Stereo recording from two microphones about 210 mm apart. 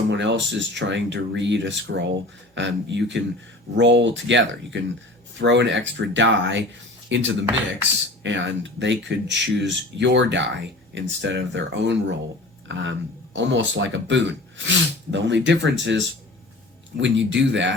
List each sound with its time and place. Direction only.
0.1 s speech: 55° right (ahead or behind)